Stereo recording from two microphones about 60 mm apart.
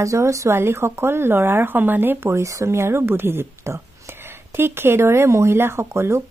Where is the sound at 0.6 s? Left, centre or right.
Right.